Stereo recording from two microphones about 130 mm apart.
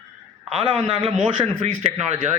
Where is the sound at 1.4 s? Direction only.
60° right (ahead or behind).